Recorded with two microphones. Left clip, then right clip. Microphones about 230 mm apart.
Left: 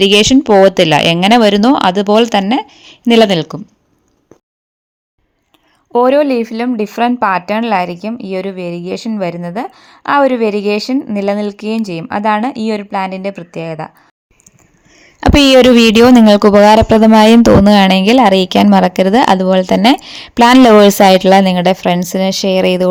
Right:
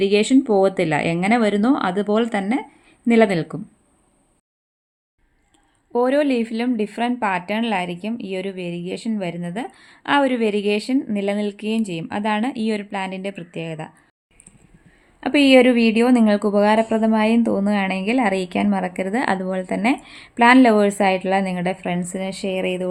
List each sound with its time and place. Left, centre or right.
0.0 s a woman's voice: left
5.9 s speech: left
15.2 s a woman's voice: left